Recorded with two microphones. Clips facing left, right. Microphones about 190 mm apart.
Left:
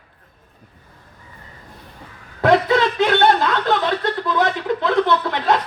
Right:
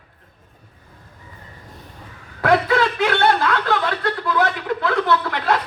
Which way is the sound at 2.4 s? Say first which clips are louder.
Left 2 dB; 20° left (ahead or behind).